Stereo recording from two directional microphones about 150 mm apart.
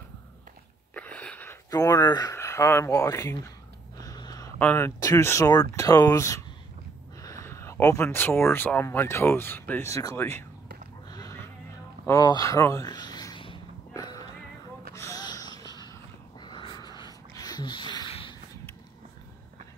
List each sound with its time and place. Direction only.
0.9 s a sound: 10° left (ahead or behind)
1.7 s speech: 25° left (ahead or behind)
4.0 s a sound: 25° left (ahead or behind)
4.6 s speech: 15° left (ahead or behind)
11.1 s goat: 25° left (ahead or behind)
12.1 s speech: 25° left (ahead or behind)
13.9 s music: 25° left (ahead or behind)
15.0 s wheeze: 25° left (ahead or behind)
16.3 s a sound: 30° left (ahead or behind)